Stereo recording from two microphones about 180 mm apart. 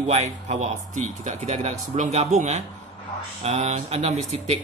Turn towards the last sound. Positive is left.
turn(degrees=-40)  # may be behind; listen again after turning